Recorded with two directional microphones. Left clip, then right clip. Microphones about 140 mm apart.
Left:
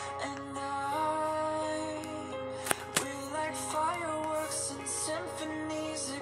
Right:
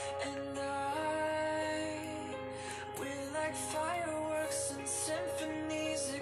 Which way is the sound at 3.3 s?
40° left (ahead or behind).